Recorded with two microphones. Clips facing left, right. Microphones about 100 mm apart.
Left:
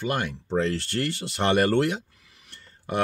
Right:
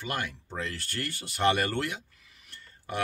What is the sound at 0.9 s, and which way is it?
Speech, 80° left.